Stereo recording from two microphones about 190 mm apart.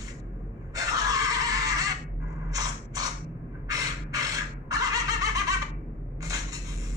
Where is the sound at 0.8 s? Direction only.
20° right (ahead or behind).